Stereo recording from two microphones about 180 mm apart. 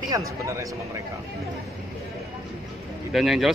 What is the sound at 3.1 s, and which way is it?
Speech, centre (ahead or behind).